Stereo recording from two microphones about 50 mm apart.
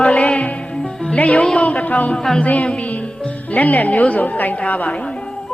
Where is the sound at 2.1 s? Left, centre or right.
Centre.